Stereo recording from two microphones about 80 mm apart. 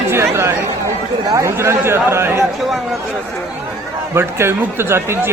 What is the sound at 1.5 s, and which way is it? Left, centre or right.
Speech, right.